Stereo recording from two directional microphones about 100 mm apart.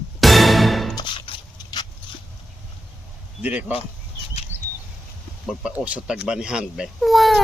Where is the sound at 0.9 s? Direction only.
55° left (ahead or behind).